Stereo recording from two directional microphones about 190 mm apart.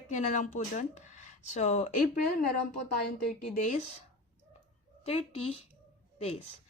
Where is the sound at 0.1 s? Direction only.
40° left (ahead or behind).